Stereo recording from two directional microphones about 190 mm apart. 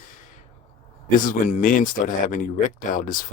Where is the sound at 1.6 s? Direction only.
45° left (ahead or behind).